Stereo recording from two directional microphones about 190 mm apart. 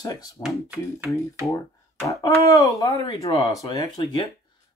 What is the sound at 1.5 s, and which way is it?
Speech, 15° left (ahead or behind).